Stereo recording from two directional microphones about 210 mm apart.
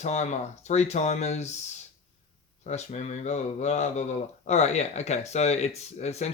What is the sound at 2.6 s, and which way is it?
Speech, 35° left (ahead or behind).